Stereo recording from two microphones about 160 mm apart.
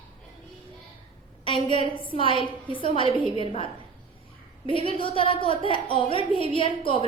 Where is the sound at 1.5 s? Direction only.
30° left (ahead or behind).